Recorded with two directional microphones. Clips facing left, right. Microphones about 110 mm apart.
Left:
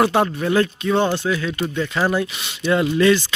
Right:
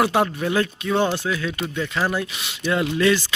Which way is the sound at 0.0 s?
5° right (ahead or behind).